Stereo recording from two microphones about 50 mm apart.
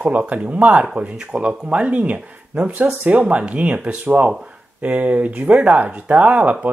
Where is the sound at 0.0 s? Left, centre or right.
Right.